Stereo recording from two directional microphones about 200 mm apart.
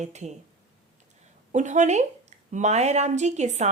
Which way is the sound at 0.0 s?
35° right (ahead or behind).